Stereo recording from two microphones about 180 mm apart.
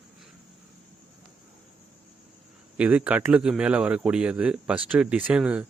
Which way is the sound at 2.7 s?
5° right (ahead or behind).